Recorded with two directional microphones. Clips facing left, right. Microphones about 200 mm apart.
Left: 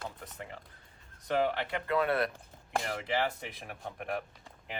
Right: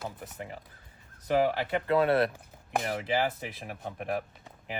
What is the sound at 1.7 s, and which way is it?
Speech, 30° right (ahead or behind).